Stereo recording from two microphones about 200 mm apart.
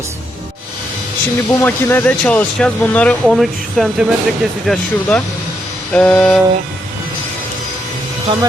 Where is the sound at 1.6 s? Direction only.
10° left (ahead or behind).